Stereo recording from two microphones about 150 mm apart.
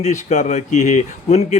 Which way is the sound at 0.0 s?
50° left (ahead or behind).